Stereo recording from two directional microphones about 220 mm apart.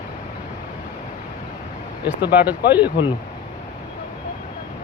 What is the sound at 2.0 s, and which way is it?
Speech, 10° right (ahead or behind).